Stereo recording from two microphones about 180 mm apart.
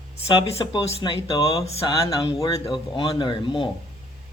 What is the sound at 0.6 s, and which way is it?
Speech, 25° left (ahead or behind).